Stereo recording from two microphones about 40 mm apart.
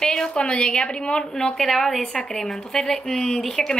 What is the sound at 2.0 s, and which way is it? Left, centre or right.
Speech, centre.